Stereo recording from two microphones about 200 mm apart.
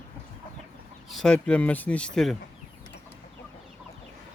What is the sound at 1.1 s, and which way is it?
Speech, centre (ahead or behind).